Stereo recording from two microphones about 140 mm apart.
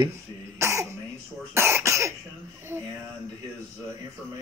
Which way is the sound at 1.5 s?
20° right (ahead or behind).